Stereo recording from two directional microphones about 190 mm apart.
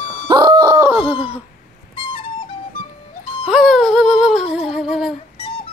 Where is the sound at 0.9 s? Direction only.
10° right (ahead or behind).